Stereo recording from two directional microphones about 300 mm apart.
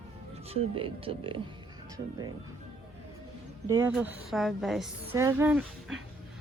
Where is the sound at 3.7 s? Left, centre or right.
Centre.